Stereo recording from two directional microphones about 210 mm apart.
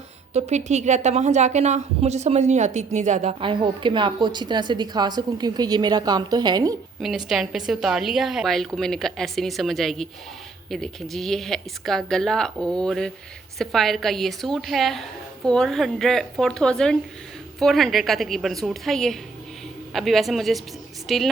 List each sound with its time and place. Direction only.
0.3 s a woman's voice: 30° right (ahead or behind)
7.0 s a woman's voice: centre (ahead or behind)